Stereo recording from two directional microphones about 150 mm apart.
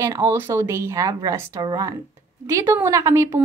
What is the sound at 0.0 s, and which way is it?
A woman's voice, 20° right (ahead or behind).